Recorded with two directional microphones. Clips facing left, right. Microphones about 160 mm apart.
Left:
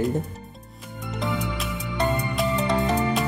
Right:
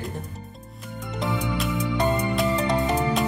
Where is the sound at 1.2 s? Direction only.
Centre (ahead or behind).